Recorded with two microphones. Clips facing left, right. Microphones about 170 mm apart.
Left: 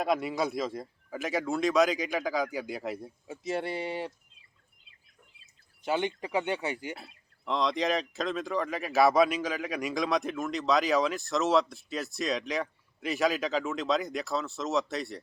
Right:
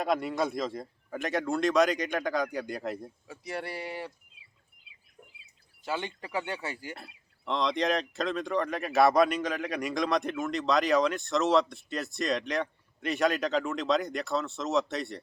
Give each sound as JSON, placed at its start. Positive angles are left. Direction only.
{"t": 0.0, "sound": "speech", "side_deg": 0}
{"t": 3.2, "sound": "speech", "side_deg": 20}
{"t": 4.4, "sound": "a sound", "side_deg": -5}
{"t": 5.8, "sound": "speech", "side_deg": 20}
{"t": 6.9, "sound": "speech", "side_deg": 0}